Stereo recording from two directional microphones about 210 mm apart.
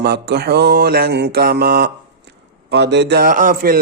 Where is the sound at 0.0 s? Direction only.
50° right (ahead or behind).